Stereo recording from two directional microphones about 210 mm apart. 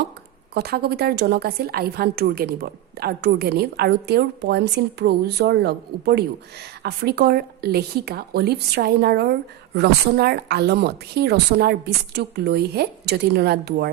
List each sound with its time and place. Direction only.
0.5 s a woman's voice: 50° right (ahead or behind)